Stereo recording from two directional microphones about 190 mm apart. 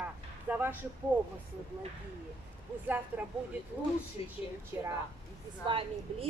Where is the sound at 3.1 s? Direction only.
10° right (ahead or behind).